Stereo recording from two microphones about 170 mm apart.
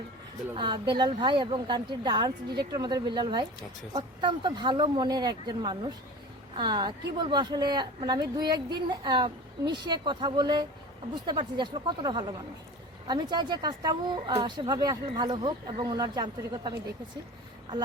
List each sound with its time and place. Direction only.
0.5 s a woman's voice: 30° right (ahead or behind)